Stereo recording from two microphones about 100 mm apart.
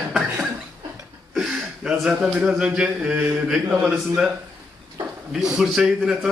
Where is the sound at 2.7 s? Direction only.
15° right (ahead or behind).